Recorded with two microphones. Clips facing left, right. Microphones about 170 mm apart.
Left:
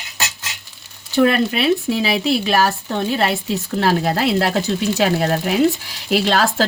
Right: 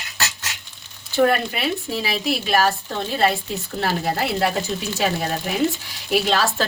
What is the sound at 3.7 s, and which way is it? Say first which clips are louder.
Speech: left 5 dB; 85° left.